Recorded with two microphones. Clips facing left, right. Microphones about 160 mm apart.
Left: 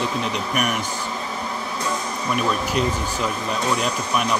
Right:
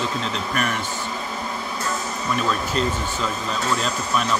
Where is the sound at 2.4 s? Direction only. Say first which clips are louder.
Left 1 dB; 10° left (ahead or behind).